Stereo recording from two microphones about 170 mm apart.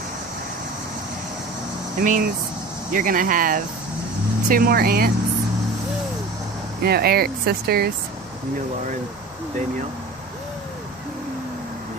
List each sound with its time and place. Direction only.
2.0 s speech: 50° right (ahead or behind)
6.8 s speech: 65° right (ahead or behind)